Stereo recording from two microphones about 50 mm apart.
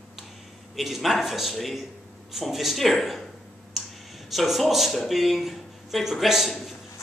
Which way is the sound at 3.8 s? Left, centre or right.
Centre.